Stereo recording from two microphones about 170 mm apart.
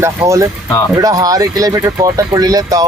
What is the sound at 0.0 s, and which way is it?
Speech, 15° right (ahead or behind).